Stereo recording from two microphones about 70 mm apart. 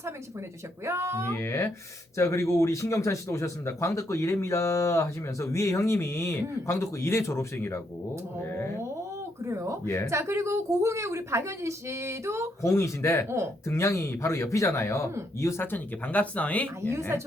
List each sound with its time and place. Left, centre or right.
0.9 s speech: right
1.4 s speech: left
9.4 s a woman's voice: right
9.8 s speech: left
10.1 s a woman's voice: right
12.6 s speech: left
15.6 s speech: left